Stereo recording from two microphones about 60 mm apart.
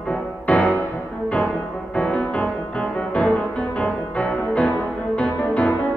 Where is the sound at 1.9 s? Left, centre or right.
Left.